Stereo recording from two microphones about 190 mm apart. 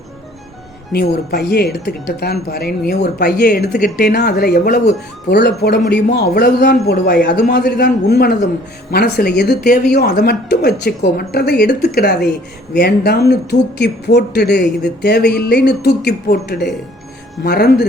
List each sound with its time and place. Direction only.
1.3 s speech: 55° left (ahead or behind)
3.8 s speech: 50° left (ahead or behind)